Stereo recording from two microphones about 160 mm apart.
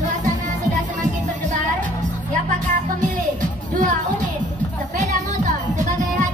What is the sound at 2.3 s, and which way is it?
Music, 50° right (ahead or behind).